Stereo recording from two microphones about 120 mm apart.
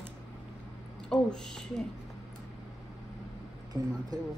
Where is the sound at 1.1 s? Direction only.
5° left (ahead or behind).